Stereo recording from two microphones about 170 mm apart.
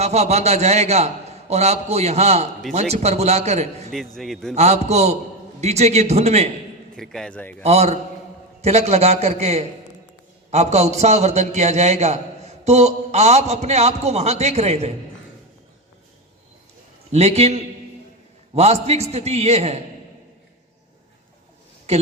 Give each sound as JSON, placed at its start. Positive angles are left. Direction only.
{"t": 0.0, "sound": "a man's voice", "side_deg": -40}
{"t": 3.9, "sound": "a man's voice", "side_deg": 0}
{"t": 4.5, "sound": "a man's voice", "side_deg": -40}
{"t": 6.9, "sound": "a man's voice", "side_deg": 5}
{"t": 7.6, "sound": "a man's voice", "side_deg": -40}
{"t": 17.1, "sound": "a man's voice", "side_deg": -40}
{"t": 21.9, "sound": "a woman's voice", "side_deg": -40}